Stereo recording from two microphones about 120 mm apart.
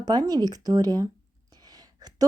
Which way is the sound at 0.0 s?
35° right (ahead or behind).